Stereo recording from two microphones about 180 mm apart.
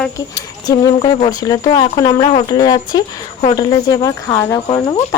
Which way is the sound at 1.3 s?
20° left (ahead or behind).